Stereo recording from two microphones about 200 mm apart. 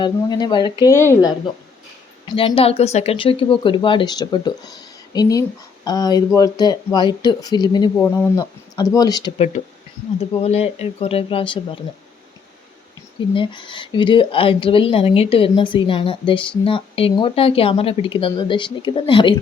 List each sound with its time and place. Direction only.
0.0 s speech: 20° left (ahead or behind)
2.2 s speech: 25° left (ahead or behind)
7.9 s speech: 10° left (ahead or behind)
10.2 s speech: 30° left (ahead or behind)
13.3 s speech: 25° left (ahead or behind)